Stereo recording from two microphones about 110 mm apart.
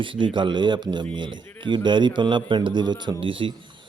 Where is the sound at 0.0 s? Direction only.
50° right (ahead or behind).